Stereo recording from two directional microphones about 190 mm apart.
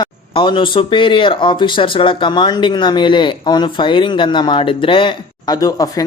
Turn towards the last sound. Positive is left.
turn(degrees=20)  # may be behind; listen again after turning